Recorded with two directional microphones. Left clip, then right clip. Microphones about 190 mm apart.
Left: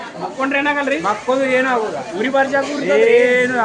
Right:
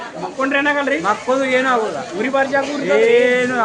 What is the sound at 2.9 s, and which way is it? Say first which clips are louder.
Speech: left 1 dB; 5° right (ahead or behind).